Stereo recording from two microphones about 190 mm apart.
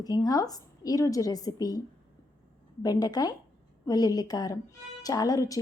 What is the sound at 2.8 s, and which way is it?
Speech, 20° left (ahead or behind).